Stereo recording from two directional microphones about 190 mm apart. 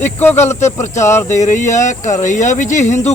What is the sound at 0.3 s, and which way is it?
Speech, 35° left (ahead or behind).